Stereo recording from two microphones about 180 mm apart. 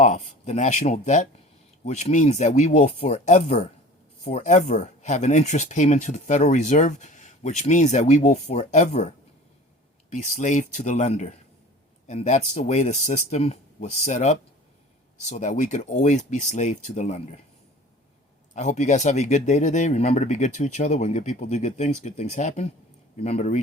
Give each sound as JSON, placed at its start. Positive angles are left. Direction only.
{"t": 0.0, "sound": "speech", "side_deg": 45}
{"t": 18.5, "sound": "speech", "side_deg": 40}